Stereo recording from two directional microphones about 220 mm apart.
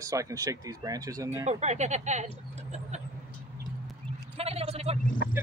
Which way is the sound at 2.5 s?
30° right (ahead or behind).